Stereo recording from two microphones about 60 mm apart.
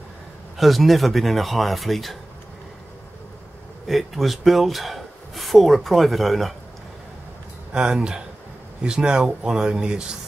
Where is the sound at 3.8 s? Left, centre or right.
Centre.